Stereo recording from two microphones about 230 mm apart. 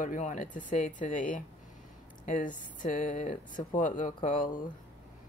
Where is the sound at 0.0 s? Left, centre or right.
Left.